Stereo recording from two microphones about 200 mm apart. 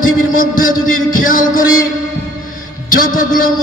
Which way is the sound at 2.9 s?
45° left (ahead or behind).